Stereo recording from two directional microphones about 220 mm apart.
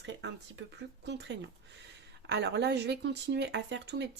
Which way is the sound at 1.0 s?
55° right (ahead or behind).